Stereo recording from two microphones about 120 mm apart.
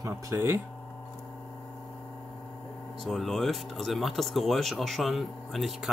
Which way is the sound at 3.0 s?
Centre (ahead or behind).